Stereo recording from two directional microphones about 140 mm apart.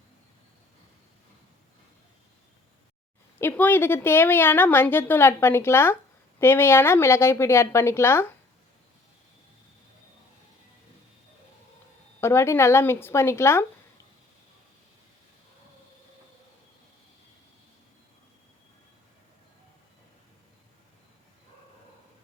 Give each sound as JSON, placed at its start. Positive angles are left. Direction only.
{"t": 3.3, "sound": "a woman's voice", "side_deg": 15}
{"t": 12.2, "sound": "a woman's voice", "side_deg": 20}